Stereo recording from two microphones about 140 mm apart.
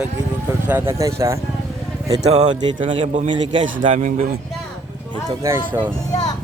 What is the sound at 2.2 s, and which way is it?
Speech, 50° right (ahead or behind).